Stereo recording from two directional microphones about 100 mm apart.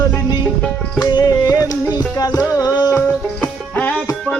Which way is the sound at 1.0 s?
40° left (ahead or behind).